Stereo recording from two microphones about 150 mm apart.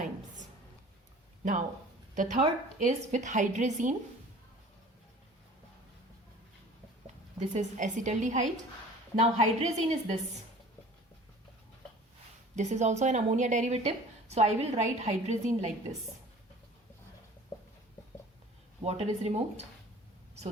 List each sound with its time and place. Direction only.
2.1 s a woman's voice: 55° right (ahead or behind)
7.3 s a woman's voice: 55° right (ahead or behind)
12.5 s a woman's voice: 50° right (ahead or behind)
18.8 s a woman's voice: 40° right (ahead or behind)